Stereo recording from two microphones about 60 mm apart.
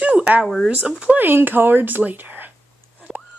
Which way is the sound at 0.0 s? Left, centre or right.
Right.